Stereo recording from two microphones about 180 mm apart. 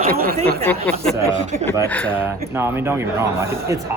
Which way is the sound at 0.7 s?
5° left (ahead or behind).